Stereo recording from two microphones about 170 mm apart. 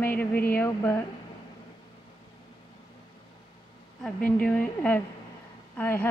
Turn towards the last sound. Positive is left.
turn(degrees=10)  # may be behind; listen again after turning